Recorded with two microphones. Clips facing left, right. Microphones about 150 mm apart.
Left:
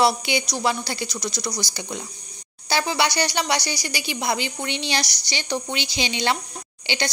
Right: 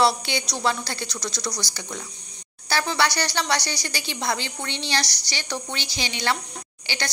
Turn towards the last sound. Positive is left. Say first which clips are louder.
# left 5 dB
turn(degrees=20)  # may be behind; listen again after turning